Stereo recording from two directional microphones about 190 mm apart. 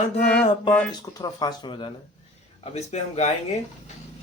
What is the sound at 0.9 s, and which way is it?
Speech, 20° left (ahead or behind).